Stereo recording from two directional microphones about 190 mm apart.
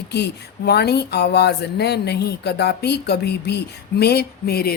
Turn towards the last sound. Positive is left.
turn(degrees=55)  # may be behind; listen again after turning